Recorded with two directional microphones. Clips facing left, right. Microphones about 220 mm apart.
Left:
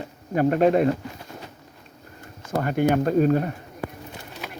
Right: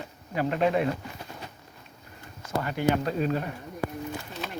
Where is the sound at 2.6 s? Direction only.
50° left (ahead or behind).